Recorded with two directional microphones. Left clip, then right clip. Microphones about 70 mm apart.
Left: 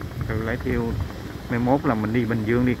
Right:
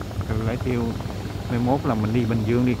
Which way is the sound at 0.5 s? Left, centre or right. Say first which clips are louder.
Even; centre.